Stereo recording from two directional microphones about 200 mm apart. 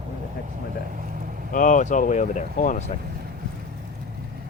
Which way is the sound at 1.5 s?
40° left (ahead or behind).